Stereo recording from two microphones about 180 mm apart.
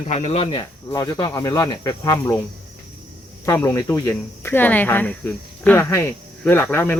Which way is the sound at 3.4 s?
15° left (ahead or behind).